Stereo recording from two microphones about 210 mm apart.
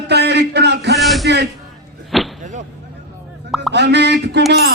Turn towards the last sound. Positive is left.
turn(degrees=-50)  # may be behind; listen again after turning